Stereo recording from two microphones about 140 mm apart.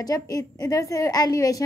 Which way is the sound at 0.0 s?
25° left (ahead or behind).